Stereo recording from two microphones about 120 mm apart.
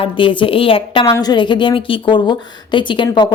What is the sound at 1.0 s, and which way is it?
A woman's voice, 30° left (ahead or behind).